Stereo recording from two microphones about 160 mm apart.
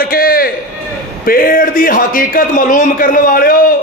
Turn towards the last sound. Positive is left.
turn(degrees=65)  # may be behind; listen again after turning